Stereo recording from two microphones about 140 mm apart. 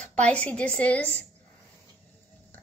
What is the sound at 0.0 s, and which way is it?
A child's voice, 10° left (ahead or behind).